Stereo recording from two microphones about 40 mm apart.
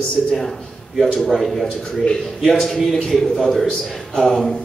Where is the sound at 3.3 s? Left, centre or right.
Centre.